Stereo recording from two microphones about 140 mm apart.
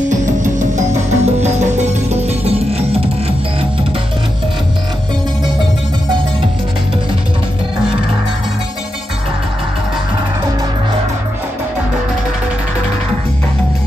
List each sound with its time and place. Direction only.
0.1 s music: 60° right (ahead or behind)